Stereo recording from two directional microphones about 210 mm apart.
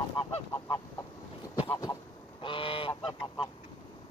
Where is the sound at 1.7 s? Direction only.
15° left (ahead or behind).